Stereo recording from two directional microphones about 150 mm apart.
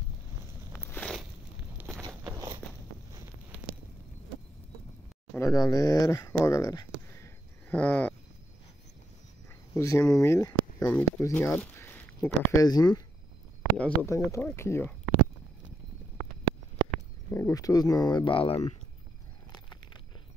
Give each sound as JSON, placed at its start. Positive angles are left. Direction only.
{"t": 0.7, "sound": "a sound", "side_deg": 15}
{"t": 2.0, "sound": "walk", "side_deg": -25}
{"t": 5.3, "sound": "speech", "side_deg": 20}
{"t": 7.7, "sound": "speech", "side_deg": 10}
{"t": 9.8, "sound": "speech", "side_deg": 20}
{"t": 12.6, "sound": "speech", "side_deg": 25}
{"t": 13.7, "sound": "speech", "side_deg": 10}
{"t": 14.1, "sound": "speech", "side_deg": 20}
{"t": 17.3, "sound": "speech", "side_deg": 15}
{"t": 19.5, "sound": "a sound", "side_deg": 30}